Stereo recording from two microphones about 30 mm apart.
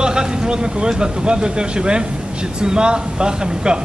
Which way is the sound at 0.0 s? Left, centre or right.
Right.